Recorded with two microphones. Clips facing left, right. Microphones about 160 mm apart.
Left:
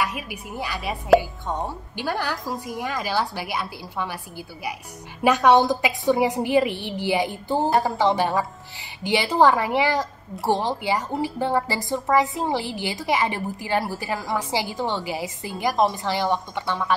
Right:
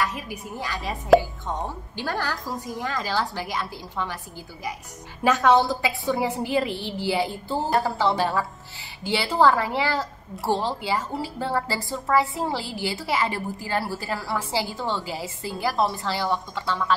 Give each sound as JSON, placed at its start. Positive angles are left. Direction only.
{"t": 0.0, "sound": "a woman's voice", "side_deg": 10}
{"t": 2.0, "sound": "a woman's voice", "side_deg": 15}
{"t": 5.2, "sound": "a woman's voice", "side_deg": 15}